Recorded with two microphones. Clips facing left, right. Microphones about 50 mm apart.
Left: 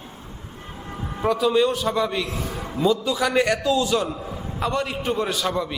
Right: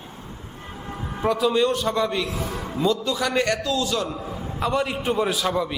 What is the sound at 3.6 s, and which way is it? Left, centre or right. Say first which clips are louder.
Speech: left 3 dB; left.